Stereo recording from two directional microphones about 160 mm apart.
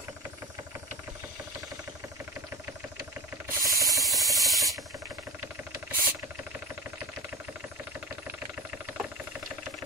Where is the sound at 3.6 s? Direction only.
20° right (ahead or behind).